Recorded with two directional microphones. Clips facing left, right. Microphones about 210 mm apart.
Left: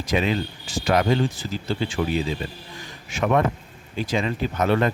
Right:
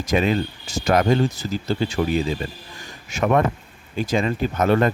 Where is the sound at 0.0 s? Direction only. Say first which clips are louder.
Right 3 dB; 45° right (ahead or behind).